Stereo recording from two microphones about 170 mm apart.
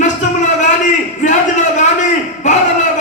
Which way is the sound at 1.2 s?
45° left (ahead or behind).